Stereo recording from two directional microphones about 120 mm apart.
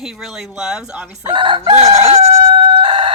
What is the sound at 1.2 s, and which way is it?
Crowing, 45° right (ahead or behind).